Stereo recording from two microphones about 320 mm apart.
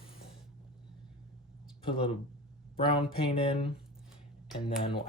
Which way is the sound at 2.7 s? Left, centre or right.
Centre.